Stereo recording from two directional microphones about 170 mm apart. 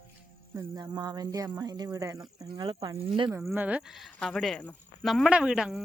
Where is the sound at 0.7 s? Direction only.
25° right (ahead or behind).